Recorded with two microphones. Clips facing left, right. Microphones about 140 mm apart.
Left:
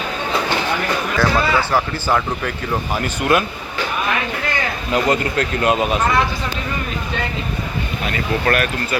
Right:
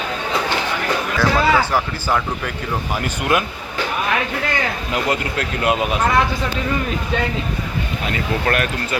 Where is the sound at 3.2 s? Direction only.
15° right (ahead or behind).